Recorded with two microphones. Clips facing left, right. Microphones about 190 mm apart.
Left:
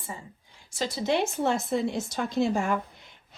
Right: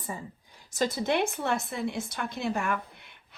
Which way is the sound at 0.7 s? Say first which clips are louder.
Even; 50° right (ahead or behind).